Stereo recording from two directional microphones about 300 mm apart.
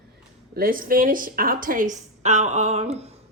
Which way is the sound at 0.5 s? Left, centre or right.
Right.